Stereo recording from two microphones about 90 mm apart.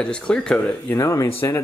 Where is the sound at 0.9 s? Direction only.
30° left (ahead or behind).